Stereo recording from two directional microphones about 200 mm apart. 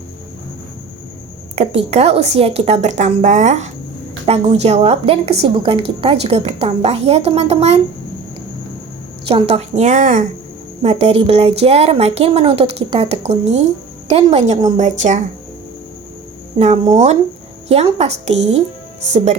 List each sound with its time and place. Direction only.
1.5 s a woman's voice: 30° right (ahead or behind)
9.2 s a woman's voice: 30° right (ahead or behind)
16.6 s a woman's voice: 35° right (ahead or behind)